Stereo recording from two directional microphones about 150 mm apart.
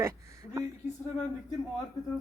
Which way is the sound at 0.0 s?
20° right (ahead or behind).